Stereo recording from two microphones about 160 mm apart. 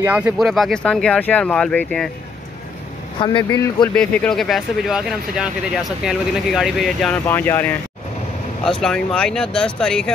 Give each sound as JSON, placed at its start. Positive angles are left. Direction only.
{"t": 0.0, "sound": "speech", "side_deg": -10}
{"t": 0.4, "sound": "speech", "side_deg": 0}
{"t": 3.2, "sound": "speech", "side_deg": 30}
{"t": 3.9, "sound": "speech", "side_deg": 5}
{"t": 7.2, "sound": "speech", "side_deg": 15}